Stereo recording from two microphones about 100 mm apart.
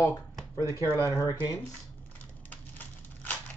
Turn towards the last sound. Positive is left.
turn(degrees=15)  # may be behind; listen again after turning